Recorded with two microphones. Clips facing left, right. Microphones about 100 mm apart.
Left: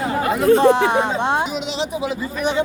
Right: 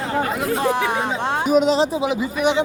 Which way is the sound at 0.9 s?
20° left (ahead or behind).